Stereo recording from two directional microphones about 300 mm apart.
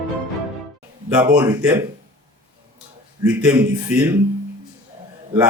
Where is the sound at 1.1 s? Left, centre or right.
Centre.